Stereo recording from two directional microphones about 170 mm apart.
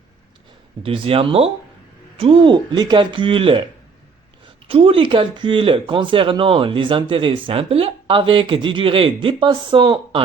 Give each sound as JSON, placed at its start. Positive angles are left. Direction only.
{"t": 0.8, "sound": "speech", "side_deg": -35}
{"t": 4.7, "sound": "speech", "side_deg": -35}